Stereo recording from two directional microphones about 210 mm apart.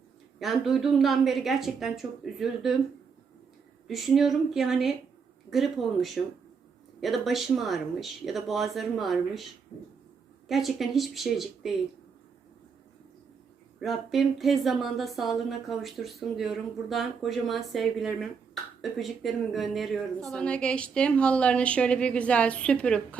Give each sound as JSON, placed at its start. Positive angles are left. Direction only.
{"t": 0.3, "sound": "speech", "side_deg": 0}
{"t": 3.8, "sound": "speech", "side_deg": 0}
{"t": 10.5, "sound": "speech", "side_deg": 0}
{"t": 13.8, "sound": "speech", "side_deg": 0}